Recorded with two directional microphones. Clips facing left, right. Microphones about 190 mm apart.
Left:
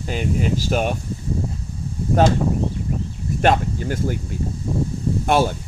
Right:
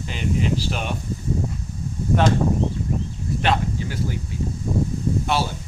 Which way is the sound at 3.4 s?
50° left (ahead or behind).